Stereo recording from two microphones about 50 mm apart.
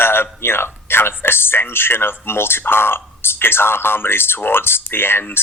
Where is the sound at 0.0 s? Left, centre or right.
Left.